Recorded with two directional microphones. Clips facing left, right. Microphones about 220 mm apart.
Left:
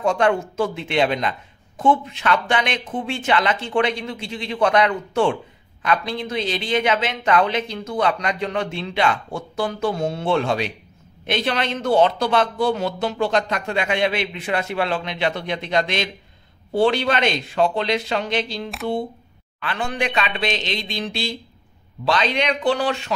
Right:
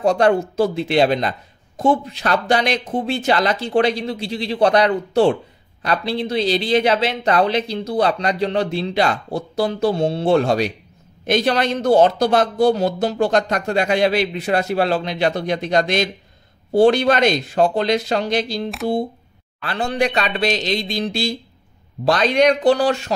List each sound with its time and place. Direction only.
0.0 s speech: 35° right (ahead or behind)